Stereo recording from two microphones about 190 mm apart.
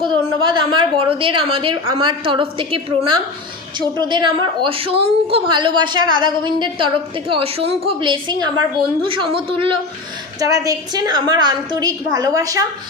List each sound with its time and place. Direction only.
0.4 s a woman's voice: 25° right (ahead or behind)
10.4 s a woman's voice: 20° right (ahead or behind)